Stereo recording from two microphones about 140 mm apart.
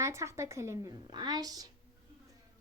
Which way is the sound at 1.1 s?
30° right (ahead or behind).